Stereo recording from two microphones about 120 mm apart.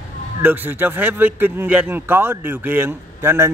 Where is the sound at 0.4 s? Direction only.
15° right (ahead or behind).